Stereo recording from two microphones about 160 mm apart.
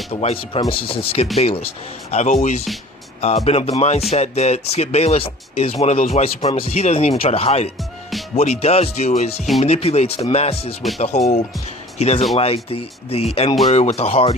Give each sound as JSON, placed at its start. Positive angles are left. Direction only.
{"t": 0.1, "sound": "speech", "side_deg": 40}